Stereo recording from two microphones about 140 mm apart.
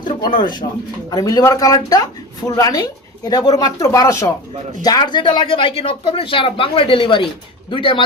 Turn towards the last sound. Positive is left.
turn(degrees=35)  # may be behind; listen again after turning